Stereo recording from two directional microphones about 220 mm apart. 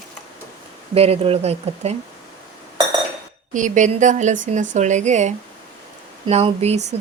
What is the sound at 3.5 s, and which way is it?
Speech, 35° right (ahead or behind).